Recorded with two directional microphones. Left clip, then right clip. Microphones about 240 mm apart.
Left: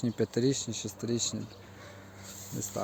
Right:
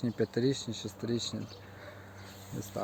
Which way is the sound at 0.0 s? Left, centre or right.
Centre.